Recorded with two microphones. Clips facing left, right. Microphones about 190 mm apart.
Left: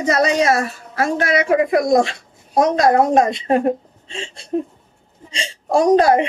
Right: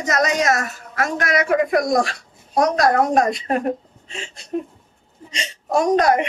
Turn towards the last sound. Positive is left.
turn(degrees=30)  # may be behind; listen again after turning